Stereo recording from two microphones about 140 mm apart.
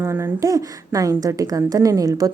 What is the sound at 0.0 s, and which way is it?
A woman's voice, 20° right (ahead or behind).